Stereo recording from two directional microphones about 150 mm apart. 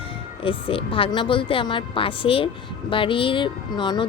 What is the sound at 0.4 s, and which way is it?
A woman's voice, 35° left (ahead or behind).